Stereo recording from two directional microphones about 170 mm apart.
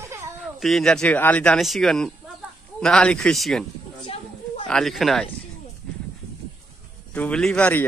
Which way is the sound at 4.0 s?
35° left (ahead or behind).